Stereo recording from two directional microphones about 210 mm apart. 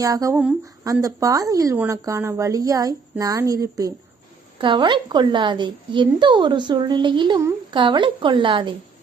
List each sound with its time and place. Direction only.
0.0 s a woman's voice: 15° right (ahead or behind)